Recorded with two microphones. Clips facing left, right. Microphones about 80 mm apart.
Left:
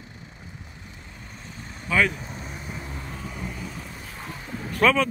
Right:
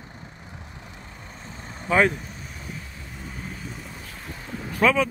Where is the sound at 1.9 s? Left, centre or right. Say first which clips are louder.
Right 3 dB; right.